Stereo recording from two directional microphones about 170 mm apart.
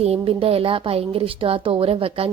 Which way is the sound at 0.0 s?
35° right (ahead or behind).